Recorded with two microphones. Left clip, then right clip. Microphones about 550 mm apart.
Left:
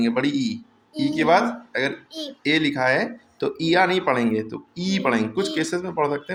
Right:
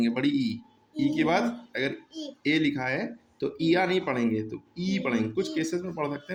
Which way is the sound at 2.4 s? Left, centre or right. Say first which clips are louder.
Left 6 dB; right.